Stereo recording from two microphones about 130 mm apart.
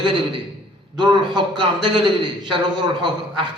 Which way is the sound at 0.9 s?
35° right (ahead or behind).